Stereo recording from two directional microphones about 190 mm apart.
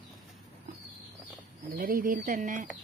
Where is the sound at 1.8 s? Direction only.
50° right (ahead or behind).